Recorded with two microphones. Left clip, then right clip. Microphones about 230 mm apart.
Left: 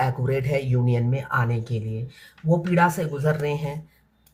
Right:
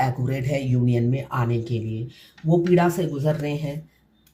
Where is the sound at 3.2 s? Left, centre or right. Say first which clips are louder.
Left 3 dB; left.